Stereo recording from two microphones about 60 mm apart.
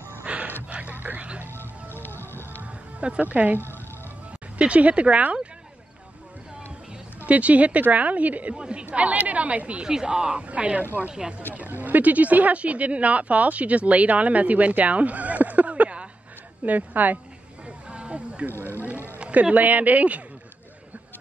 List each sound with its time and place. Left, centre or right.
0.2 s gasp: right
0.7 s music: right
1.5 s music: left
2.6 s music: right
4.6 s speech: right
7.2 s speech: right
17.6 s a sound: centre
19.1 s speech: centre